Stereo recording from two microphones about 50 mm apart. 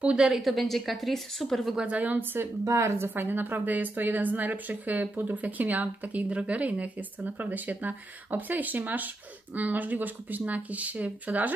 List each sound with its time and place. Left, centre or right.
0.0 s speech: centre
0.4 s a woman's voice: centre
1.8 s speech: right
2.1 s speech: right
2.7 s speech: right
3.2 s a woman's voice: right